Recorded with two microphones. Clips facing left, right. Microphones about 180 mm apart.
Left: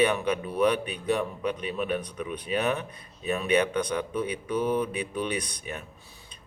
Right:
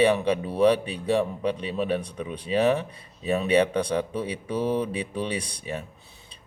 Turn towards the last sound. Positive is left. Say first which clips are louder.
# right 2 dB
turn(degrees=-30)  # may be behind; listen again after turning